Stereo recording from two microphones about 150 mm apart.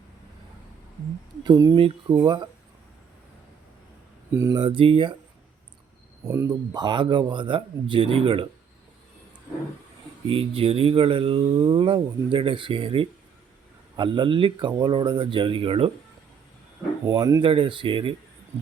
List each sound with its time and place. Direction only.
1.5 s speech: 20° right (ahead or behind)
1.7 s speech: 35° right (ahead or behind)
4.5 s speech: 35° right (ahead or behind)
6.2 s speech: 15° right (ahead or behind); by 8.4 s 35° right (ahead or behind)
10.2 s speech: 35° right (ahead or behind)
17.1 s speech: 25° right (ahead or behind)
17.4 s speech: 35° right (ahead or behind)